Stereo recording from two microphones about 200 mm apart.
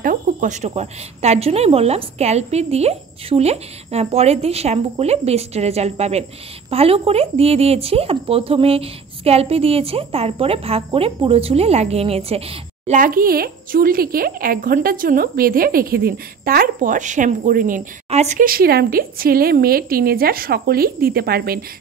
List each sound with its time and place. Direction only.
0.0 s a woman's voice: 40° right (ahead or behind)